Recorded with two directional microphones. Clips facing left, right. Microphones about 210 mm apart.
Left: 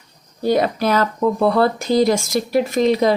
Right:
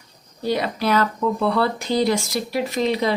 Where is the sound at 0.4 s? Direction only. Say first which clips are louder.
Left 5 dB; 50° left (ahead or behind).